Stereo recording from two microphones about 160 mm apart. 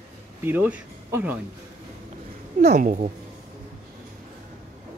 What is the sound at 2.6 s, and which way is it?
Speech, 45° right (ahead or behind).